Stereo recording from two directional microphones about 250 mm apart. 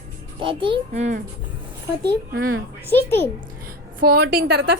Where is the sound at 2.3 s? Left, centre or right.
Right.